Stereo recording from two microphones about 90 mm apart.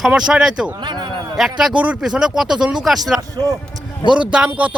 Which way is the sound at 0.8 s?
55° right (ahead or behind).